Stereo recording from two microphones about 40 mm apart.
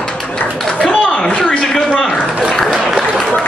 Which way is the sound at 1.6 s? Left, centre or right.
Centre.